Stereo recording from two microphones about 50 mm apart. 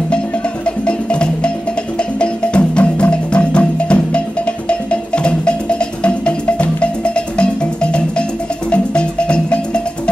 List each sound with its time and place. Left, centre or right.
0.7 s music: left